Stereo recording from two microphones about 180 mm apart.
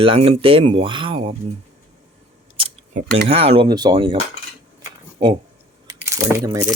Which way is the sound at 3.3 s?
30° right (ahead or behind).